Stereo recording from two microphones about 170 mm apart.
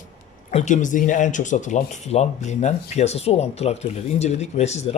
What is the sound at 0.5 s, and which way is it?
Speech, 45° left (ahead or behind).